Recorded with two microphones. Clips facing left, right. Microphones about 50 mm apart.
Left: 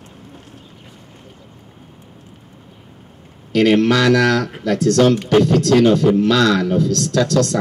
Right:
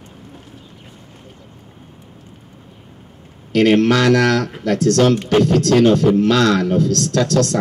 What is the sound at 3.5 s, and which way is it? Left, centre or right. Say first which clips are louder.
Speech: even; right.